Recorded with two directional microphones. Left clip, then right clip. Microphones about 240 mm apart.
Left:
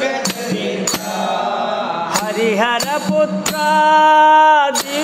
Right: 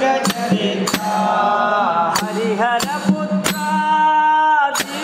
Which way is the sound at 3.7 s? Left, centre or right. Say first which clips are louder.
Left 5 dB; left.